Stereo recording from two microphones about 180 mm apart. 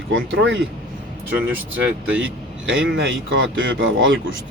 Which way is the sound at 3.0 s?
90° right.